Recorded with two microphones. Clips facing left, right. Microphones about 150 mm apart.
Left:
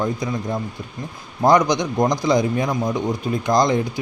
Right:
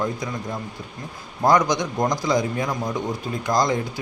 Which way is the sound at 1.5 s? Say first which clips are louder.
Left 3 dB; 15° left (ahead or behind).